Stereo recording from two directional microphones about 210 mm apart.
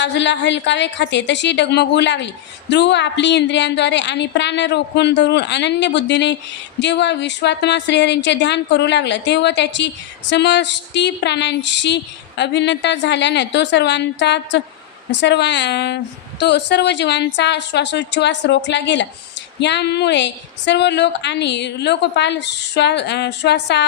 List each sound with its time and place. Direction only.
0.0 s a woman's voice: 55° left (ahead or behind)